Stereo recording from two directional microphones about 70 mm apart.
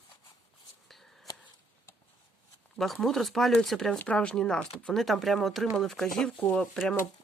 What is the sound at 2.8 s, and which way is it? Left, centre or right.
Speech, centre.